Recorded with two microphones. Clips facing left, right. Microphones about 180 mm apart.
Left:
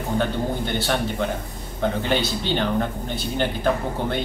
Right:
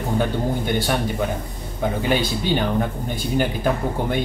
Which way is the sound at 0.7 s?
10° right (ahead or behind).